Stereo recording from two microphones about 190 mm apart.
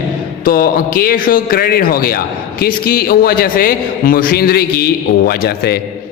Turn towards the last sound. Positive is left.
turn(degrees=55)  # may be behind; listen again after turning